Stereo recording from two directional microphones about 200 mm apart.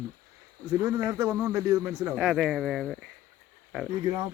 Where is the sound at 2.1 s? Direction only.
Centre (ahead or behind).